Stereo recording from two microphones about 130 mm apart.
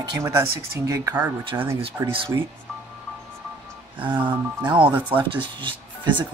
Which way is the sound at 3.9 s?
40° right (ahead or behind).